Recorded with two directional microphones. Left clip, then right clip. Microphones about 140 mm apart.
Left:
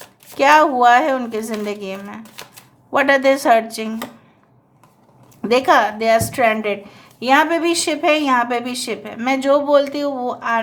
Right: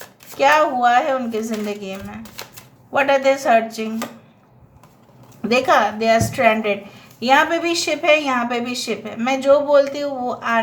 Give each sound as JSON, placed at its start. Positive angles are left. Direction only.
{"t": 0.3, "sound": "a woman's voice", "side_deg": 45}
{"t": 5.4, "sound": "a woman's voice", "side_deg": 35}
{"t": 10.2, "sound": "speech", "side_deg": 25}